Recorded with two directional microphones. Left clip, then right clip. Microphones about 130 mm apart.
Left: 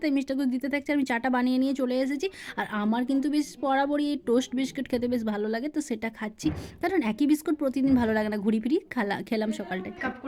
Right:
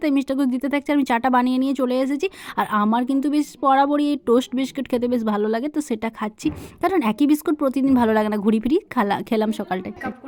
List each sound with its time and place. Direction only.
0.0 s speech: 35° right (ahead or behind)